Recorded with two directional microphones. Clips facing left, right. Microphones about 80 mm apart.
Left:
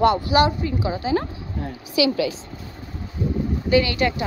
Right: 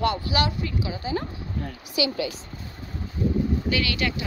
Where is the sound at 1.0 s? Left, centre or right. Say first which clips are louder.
Left 7 dB; left.